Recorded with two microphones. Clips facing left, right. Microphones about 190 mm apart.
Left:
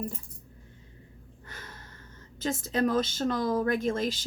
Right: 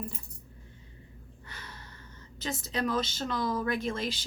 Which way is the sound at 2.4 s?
50° left (ahead or behind).